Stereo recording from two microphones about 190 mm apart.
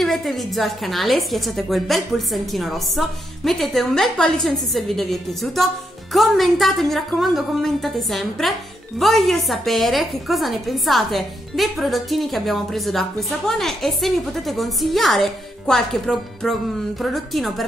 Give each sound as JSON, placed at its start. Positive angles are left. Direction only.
{"t": 0.0, "sound": "a woman's voice", "side_deg": 0}